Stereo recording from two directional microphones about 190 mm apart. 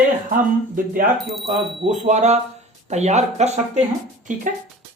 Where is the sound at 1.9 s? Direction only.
40° right (ahead or behind).